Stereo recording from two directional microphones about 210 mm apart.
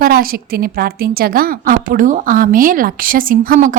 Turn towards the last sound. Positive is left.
turn(degrees=-40)  # may be behind; listen again after turning